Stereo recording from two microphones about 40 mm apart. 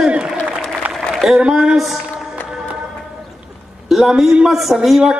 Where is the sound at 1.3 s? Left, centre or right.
Centre.